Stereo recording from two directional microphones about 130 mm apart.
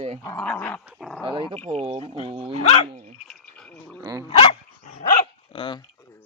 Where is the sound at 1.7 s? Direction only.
45° right (ahead or behind).